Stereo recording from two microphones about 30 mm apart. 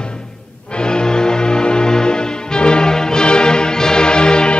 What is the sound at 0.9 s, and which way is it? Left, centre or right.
Music, left.